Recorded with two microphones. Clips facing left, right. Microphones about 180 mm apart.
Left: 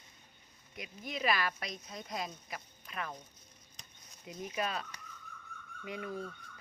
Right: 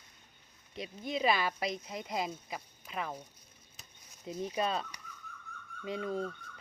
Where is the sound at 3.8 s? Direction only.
5° right (ahead or behind).